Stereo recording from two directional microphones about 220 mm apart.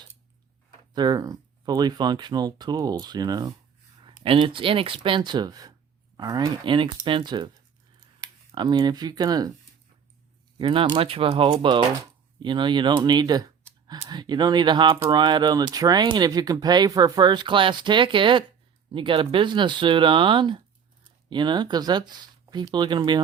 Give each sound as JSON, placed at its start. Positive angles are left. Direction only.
{"t": 0.9, "sound": "speech", "side_deg": -20}
{"t": 10.6, "sound": "speech", "side_deg": -25}